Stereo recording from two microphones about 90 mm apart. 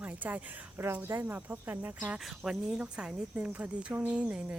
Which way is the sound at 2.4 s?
5° right (ahead or behind).